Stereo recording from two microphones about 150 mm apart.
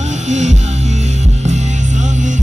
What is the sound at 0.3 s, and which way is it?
Music, 50° right (ahead or behind).